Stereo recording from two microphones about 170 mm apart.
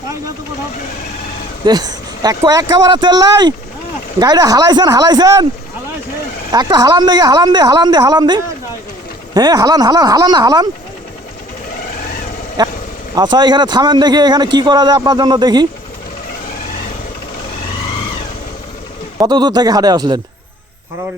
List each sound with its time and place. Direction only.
1.6 s a man's voice: 25° right (ahead or behind)
6.5 s a man's voice: 25° right (ahead or behind)
12.6 s vehicle: 25° right (ahead or behind)
13.1 s a man's voice: 25° right (ahead or behind)
19.2 s a man's voice: 25° right (ahead or behind)